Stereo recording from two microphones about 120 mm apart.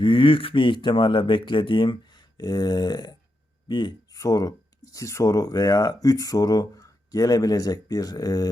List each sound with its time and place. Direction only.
0.0 s speech: 45° left (ahead or behind)